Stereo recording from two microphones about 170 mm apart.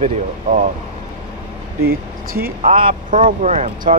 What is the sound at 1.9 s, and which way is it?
Speech, 60° right (ahead or behind).